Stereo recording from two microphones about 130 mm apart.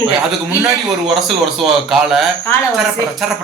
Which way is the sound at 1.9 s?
5° right (ahead or behind).